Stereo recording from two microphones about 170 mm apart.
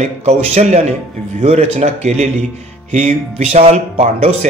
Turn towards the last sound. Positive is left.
turn(degrees=-40)  # may be behind; listen again after turning